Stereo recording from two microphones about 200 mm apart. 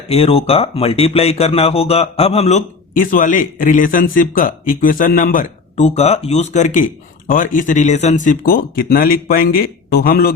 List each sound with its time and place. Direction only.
0.1 s speech: 30° left (ahead or behind); by 10.3 s 50° left (ahead or behind)